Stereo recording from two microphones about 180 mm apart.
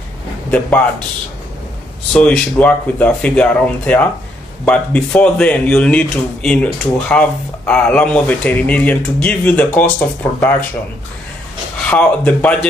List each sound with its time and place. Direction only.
0.5 s speech: 10° left (ahead or behind)
2.1 s speech: 5° left (ahead or behind)
11.8 s speech: 5° left (ahead or behind)